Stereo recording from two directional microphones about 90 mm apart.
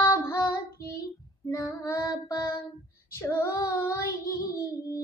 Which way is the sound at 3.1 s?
30° left (ahead or behind).